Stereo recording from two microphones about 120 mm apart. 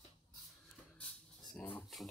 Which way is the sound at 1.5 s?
15° left (ahead or behind).